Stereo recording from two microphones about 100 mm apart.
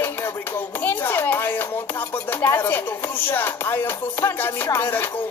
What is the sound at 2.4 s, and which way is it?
Speech, 20° left (ahead or behind).